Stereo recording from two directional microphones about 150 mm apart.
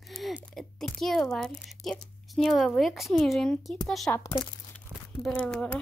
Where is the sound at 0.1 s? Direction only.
Centre (ahead or behind).